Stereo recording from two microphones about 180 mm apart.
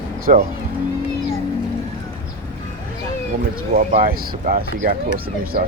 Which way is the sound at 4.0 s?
50° right (ahead or behind).